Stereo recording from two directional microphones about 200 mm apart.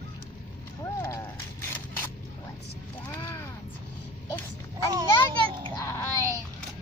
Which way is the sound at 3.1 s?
15° left (ahead or behind).